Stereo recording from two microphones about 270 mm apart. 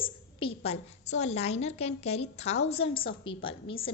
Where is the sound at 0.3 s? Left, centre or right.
Left.